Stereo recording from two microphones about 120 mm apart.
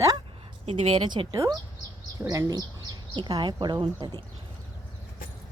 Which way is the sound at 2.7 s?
40° right (ahead or behind).